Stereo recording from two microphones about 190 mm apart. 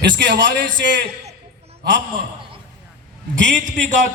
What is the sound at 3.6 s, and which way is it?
Speech, 40° right (ahead or behind).